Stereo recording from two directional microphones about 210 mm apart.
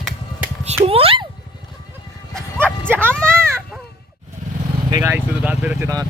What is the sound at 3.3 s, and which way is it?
Baby cry, 10° right (ahead or behind).